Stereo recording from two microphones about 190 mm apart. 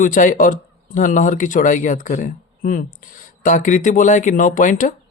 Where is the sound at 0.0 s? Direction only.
45° left (ahead or behind).